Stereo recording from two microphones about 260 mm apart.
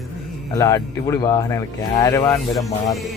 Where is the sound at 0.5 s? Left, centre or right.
Centre.